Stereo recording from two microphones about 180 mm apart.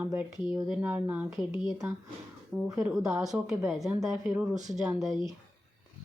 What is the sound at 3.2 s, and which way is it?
Speech, centre (ahead or behind).